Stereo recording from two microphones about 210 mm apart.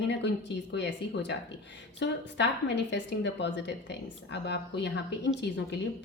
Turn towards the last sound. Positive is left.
turn(degrees=55)  # may be behind; listen again after turning